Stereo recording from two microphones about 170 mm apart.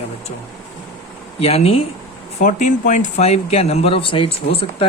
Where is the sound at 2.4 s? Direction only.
45° left (ahead or behind).